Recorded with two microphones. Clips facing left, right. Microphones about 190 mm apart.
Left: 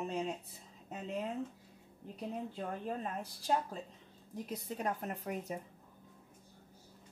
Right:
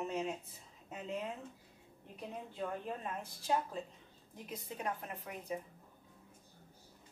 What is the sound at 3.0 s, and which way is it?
A woman's voice, 35° left (ahead or behind).